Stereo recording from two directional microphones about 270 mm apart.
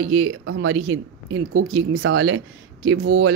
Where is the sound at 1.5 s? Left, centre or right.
Right.